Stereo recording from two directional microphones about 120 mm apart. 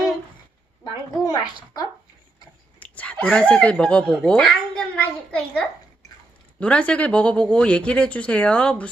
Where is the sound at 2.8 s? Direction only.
10° left (ahead or behind).